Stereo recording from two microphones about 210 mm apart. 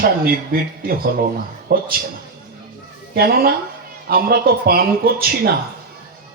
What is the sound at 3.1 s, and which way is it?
A man's voice, 45° right (ahead or behind).